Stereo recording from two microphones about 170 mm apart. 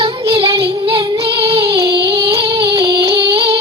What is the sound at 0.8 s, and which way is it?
Child singing, 30° right (ahead or behind).